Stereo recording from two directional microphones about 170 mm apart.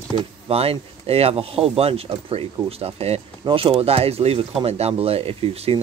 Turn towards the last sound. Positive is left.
turn(degrees=-35)  # may be behind; listen again after turning